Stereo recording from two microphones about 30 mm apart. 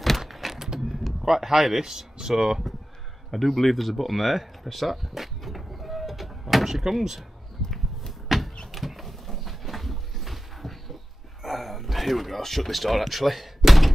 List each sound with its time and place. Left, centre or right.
0.3 s a sound: centre
1.2 s speech: centre
3.3 s speech: centre
5.6 s printer: centre
6.5 s door: centre
6.8 s speech: centre
8.1 s a sound: centre
12.4 s speech: centre